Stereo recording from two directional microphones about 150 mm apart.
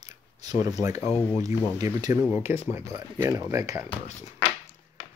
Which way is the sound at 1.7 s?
20° right (ahead or behind).